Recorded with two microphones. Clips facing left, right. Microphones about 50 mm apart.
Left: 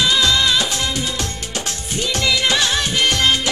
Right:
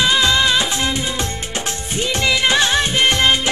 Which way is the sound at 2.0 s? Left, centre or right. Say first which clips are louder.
Right 1 dB; right.